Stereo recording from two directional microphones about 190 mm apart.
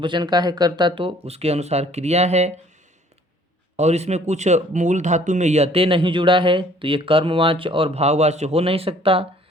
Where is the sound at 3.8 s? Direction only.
35° right (ahead or behind).